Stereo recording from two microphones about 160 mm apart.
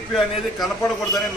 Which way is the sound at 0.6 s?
20° left (ahead or behind).